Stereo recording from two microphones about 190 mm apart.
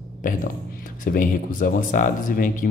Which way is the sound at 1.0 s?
45° left (ahead or behind).